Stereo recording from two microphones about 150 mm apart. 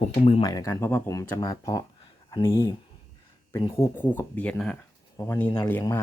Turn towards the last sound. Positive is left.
turn(degrees=15)  # may be behind; listen again after turning